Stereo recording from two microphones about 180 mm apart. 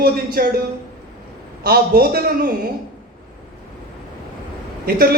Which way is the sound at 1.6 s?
60° right (ahead or behind).